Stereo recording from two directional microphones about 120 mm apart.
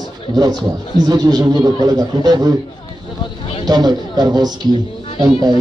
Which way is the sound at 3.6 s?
35° right (ahead or behind).